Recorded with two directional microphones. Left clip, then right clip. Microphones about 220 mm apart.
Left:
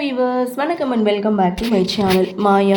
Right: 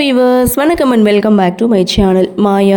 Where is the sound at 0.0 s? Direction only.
45° right (ahead or behind).